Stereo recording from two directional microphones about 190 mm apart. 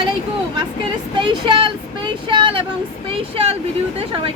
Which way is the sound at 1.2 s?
25° right (ahead or behind).